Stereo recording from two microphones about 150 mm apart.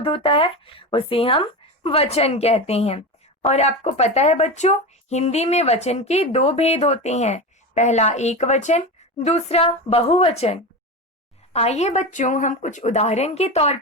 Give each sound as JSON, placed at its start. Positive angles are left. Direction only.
{"t": 0.0, "sound": "speech", "side_deg": 35}